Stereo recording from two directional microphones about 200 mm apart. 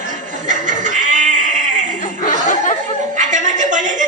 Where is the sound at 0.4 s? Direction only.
40° right (ahead or behind).